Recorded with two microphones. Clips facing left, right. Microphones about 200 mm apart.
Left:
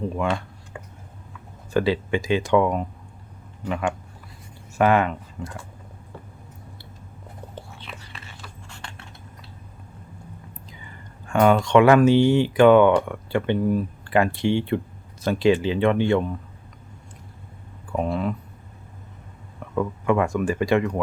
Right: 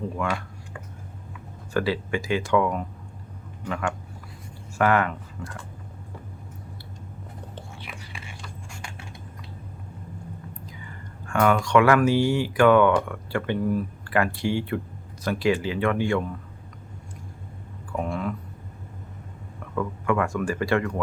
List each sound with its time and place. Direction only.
0.2 s a sound: 20° left (ahead or behind)
1.7 s speech: 20° left (ahead or behind)
7.8 s biting: 10° right (ahead or behind)
8.7 s typing: 10° right (ahead or behind)
11.3 s speech: 20° left (ahead or behind)
17.9 s speech: 20° left (ahead or behind)
19.7 s speech: 20° left (ahead or behind)